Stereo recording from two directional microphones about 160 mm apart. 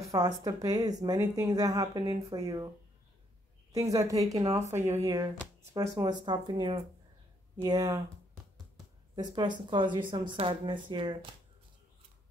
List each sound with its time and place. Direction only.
0.0 s speech: 20° right (ahead or behind)
3.7 s speech: 20° right (ahead or behind)
9.1 s speech: 25° right (ahead or behind)